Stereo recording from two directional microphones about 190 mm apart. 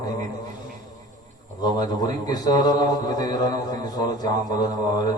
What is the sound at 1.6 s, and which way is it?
Mantra, 20° left (ahead or behind).